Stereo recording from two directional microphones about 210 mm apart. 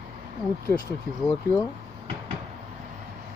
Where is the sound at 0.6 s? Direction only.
20° left (ahead or behind).